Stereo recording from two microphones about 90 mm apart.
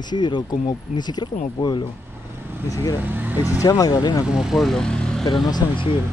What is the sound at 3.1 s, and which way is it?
Speech, 20° right (ahead or behind).